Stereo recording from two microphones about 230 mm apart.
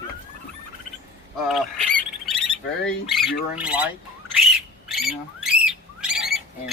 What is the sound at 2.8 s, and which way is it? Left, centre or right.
Speech, centre.